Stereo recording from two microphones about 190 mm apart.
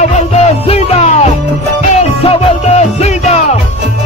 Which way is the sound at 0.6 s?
35° left (ahead or behind).